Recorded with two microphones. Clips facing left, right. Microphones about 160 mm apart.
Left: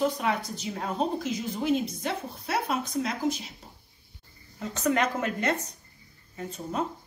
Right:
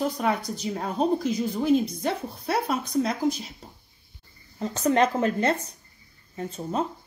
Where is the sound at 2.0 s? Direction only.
35° right (ahead or behind).